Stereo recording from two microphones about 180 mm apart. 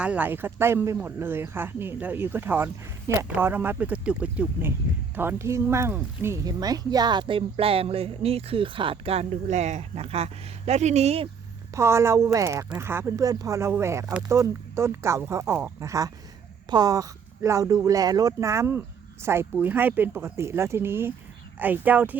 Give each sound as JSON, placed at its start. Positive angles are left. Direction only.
{"t": 0.0, "sound": "speech", "side_deg": -10}
{"t": 11.7, "sound": "speech", "side_deg": -15}